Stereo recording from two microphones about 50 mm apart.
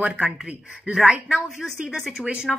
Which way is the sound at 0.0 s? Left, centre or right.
Right.